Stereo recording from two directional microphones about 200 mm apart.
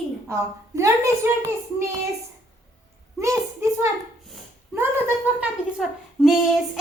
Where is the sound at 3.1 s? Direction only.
15° right (ahead or behind).